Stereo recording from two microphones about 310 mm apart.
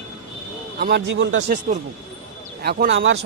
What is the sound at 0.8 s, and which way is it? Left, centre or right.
Speech, right.